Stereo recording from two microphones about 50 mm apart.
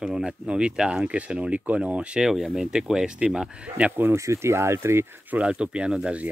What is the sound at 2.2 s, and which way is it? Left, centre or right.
Speech, centre.